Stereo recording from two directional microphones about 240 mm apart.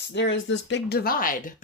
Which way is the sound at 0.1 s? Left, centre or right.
Left.